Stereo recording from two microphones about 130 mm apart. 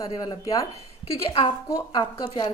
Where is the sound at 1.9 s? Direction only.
35° left (ahead or behind).